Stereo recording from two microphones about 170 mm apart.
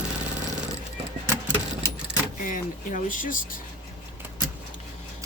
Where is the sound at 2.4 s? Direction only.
50° left (ahead or behind).